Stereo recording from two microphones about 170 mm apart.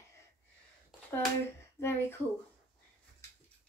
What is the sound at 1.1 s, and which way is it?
A child's voice, 15° left (ahead or behind).